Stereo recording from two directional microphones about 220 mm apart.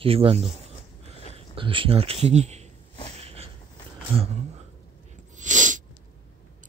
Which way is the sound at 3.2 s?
30° right (ahead or behind).